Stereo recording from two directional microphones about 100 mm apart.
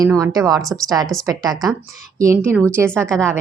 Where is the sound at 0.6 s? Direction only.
Centre (ahead or behind).